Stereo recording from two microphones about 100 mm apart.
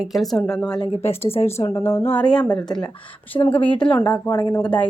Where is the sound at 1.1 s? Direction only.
80° left.